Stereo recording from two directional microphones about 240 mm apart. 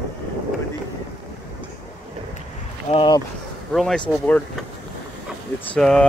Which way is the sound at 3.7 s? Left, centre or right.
Centre.